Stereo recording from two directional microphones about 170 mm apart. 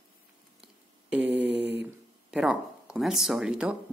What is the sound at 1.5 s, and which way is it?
Mantra, 90° right.